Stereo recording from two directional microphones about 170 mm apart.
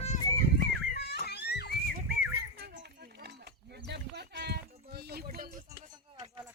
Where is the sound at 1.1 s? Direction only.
75° left (ahead or behind).